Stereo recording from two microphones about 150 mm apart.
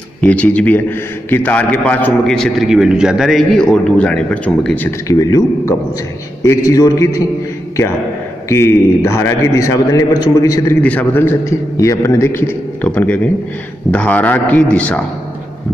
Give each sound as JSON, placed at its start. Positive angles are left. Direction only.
{"t": 0.2, "sound": "a man's voice", "side_deg": 10}
{"t": 5.2, "sound": "a man's voice", "side_deg": 25}
{"t": 8.5, "sound": "a man's voice", "side_deg": 20}
{"t": 10.8, "sound": "a man's voice", "side_deg": 10}